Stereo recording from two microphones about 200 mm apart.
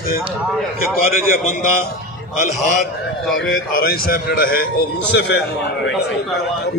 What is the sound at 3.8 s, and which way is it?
Speech, 50° left (ahead or behind).